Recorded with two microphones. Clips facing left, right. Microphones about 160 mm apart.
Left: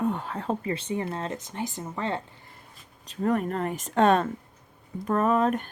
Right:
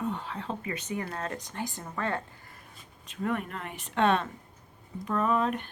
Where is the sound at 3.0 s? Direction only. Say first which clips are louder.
Left 6 dB; 35° left (ahead or behind).